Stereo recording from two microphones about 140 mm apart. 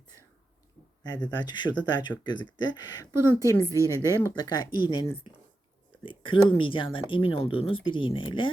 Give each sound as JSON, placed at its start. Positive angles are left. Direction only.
{"t": 1.0, "sound": "speech", "side_deg": 30}
{"t": 3.6, "sound": "speech", "side_deg": -20}
{"t": 4.4, "sound": "speech", "side_deg": 30}